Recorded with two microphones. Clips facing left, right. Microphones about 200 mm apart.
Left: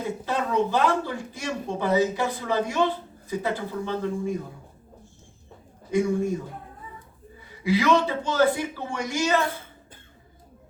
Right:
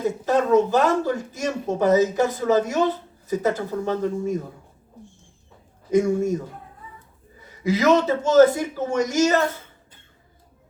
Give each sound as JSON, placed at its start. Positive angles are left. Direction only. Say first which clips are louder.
{"t": 0.0, "sound": "speech", "louder": "right 7 dB", "side_deg": -45}
{"t": 5.9, "sound": "speech", "louder": "right 4 dB", "side_deg": -45}
{"t": 7.4, "sound": "speech", "louder": "right 3 dB", "side_deg": -45}